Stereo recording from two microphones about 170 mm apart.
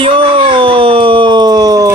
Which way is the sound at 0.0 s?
35° right (ahead or behind).